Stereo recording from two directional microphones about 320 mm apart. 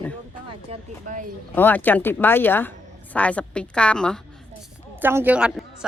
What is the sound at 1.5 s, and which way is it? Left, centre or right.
A woman's voice, centre.